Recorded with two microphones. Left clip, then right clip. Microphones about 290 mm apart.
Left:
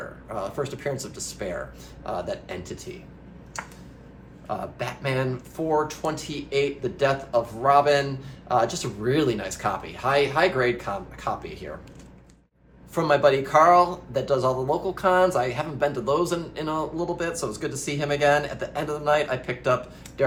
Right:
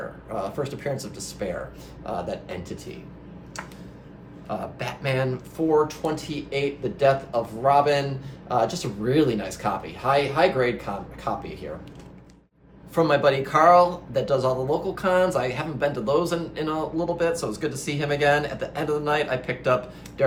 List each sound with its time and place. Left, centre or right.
0.3 s speech: centre
4.4 s speech: centre
12.9 s speech: centre